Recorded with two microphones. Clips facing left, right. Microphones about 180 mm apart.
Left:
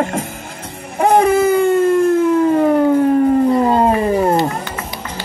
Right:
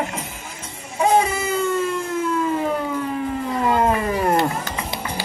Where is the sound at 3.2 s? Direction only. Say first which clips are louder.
Left 11 dB; 40° left (ahead or behind).